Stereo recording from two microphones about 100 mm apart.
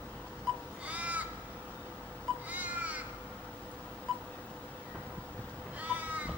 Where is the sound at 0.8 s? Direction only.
15° right (ahead or behind).